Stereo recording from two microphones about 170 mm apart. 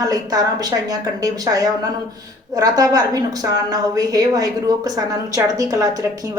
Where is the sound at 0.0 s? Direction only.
20° right (ahead or behind).